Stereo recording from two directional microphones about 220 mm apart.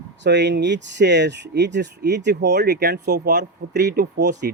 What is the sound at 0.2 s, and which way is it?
Speech, 50° right (ahead or behind).